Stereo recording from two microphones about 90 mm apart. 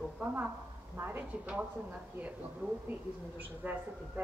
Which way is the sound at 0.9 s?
25° right (ahead or behind).